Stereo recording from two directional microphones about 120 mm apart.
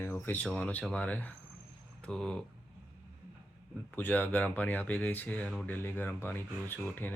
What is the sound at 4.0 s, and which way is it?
Speech, 15° left (ahead or behind).